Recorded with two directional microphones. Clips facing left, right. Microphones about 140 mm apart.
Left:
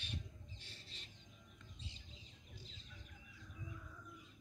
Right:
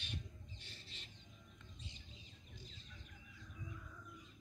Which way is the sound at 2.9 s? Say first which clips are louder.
Even; 5° left (ahead or behind).